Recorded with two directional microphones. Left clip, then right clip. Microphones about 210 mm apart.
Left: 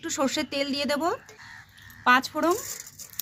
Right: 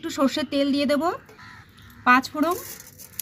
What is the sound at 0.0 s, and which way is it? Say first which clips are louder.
Speech: right 3 dB; 20° left (ahead or behind).